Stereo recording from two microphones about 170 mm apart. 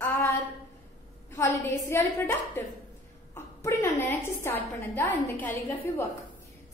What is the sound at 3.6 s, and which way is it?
A woman's voice, 15° left (ahead or behind).